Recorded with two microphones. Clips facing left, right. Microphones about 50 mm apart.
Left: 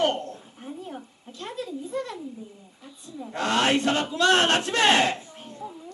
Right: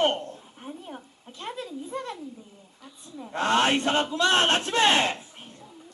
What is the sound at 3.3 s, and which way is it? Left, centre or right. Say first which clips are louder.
Speech: even; right.